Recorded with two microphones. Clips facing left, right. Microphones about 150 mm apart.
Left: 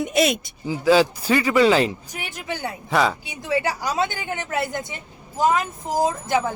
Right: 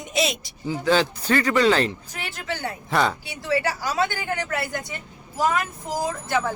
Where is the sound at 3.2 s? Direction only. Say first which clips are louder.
Even; 20° left (ahead or behind).